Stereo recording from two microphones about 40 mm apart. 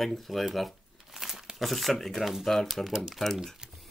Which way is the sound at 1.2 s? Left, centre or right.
Centre.